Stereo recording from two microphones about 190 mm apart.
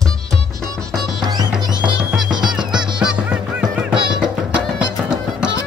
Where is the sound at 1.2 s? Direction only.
20° right (ahead or behind).